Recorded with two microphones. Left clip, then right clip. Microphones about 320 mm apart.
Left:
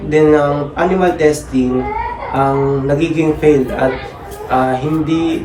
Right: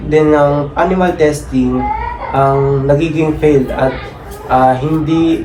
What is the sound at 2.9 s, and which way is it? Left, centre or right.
Speech, centre.